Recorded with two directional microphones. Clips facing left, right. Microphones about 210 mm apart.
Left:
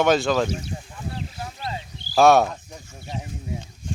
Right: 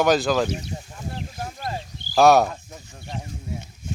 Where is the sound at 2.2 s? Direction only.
Centre (ahead or behind).